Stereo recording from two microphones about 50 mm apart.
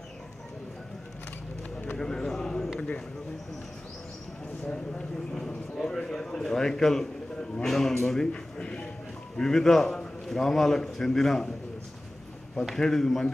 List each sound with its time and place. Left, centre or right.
2.0 s a sound: centre
4.6 s a sound: centre
7.6 s a man's voice: centre
8.3 s speech: left
9.4 s a man's voice: centre
12.7 s a man's voice: centre